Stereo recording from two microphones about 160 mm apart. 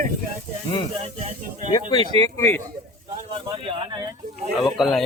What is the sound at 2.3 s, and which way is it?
Speech, 15° left (ahead or behind).